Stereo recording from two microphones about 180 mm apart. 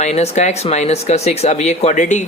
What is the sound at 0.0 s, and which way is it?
Speech, 40° left (ahead or behind).